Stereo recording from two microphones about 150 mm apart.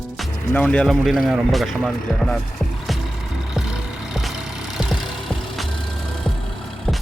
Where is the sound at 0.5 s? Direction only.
10° left (ahead or behind).